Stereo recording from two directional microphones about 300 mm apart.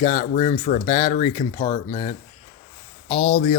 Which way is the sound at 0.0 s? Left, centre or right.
Centre.